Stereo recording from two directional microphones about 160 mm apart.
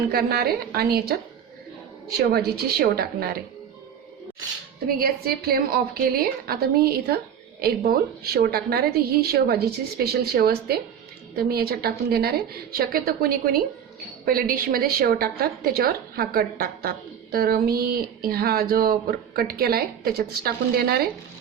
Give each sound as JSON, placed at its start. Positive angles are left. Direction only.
{"t": 0.1, "sound": "speech", "side_deg": -80}
{"t": 4.9, "sound": "speech", "side_deg": -70}